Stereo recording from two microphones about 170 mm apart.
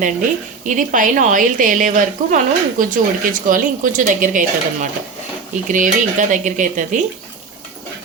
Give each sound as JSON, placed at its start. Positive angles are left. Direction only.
{"t": 0.6, "sound": "a woman's voice", "side_deg": -50}